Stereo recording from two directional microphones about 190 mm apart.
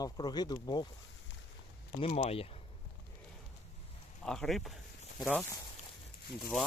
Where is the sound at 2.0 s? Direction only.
35° left (ahead or behind).